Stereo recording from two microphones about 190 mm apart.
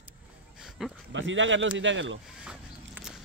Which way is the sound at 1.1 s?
80° right.